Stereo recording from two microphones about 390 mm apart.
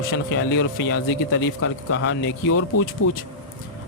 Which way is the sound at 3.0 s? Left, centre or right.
Left.